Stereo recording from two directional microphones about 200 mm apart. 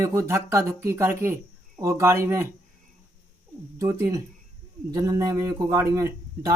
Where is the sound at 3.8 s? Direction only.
15° right (ahead or behind).